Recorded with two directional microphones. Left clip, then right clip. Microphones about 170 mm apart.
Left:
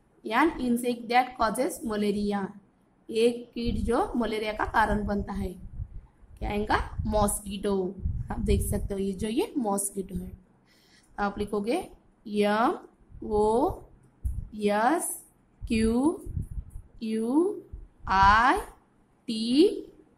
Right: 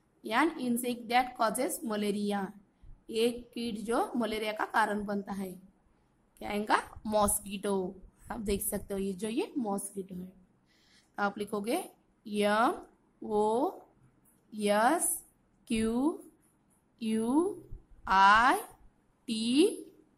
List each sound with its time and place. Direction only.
0.2 s a woman's voice: 10° right (ahead or behind)
6.4 s a woman's voice: 20° right (ahead or behind)
9.6 s a woman's voice: centre (ahead or behind)
10.9 s a woman's voice: 15° right (ahead or behind)
17.0 s a woman's voice: 20° right (ahead or behind)